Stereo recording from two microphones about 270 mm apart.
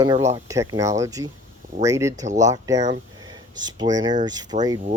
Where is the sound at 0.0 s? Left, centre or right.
Centre.